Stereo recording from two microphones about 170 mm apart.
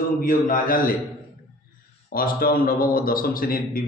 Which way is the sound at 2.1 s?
55° left (ahead or behind).